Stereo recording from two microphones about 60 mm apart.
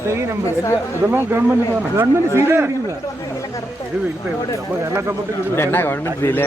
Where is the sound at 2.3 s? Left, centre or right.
Right.